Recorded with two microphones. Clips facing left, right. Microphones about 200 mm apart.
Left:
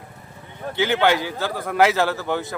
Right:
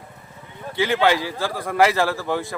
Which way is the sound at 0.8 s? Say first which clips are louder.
Even; centre (ahead or behind).